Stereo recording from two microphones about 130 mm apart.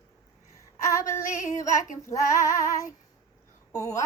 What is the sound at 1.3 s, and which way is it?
Female singing, 75° left (ahead or behind).